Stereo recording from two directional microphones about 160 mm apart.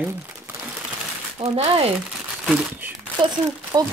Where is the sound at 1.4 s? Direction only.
40° right (ahead or behind).